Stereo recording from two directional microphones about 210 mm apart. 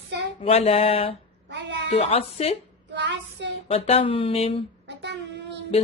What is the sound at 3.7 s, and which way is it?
Speech, 30° left (ahead or behind).